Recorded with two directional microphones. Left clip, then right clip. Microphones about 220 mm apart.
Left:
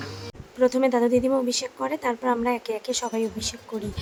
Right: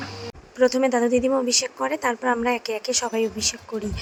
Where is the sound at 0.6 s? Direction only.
10° right (ahead or behind).